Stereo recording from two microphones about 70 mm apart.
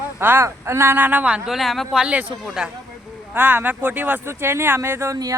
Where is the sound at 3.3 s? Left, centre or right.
Right.